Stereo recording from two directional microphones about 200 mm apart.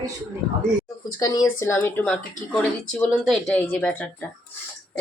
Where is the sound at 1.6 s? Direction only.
10° left (ahead or behind).